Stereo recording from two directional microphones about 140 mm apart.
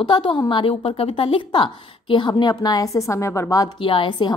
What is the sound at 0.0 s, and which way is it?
A woman's voice, 35° left (ahead or behind).